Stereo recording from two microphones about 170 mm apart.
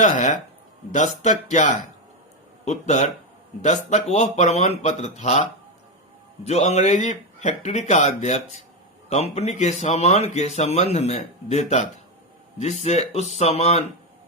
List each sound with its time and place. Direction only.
0.0 s speech: 45° left (ahead or behind)